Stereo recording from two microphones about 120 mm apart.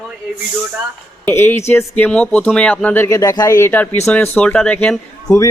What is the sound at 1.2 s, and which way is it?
Speech, 15° left (ahead or behind).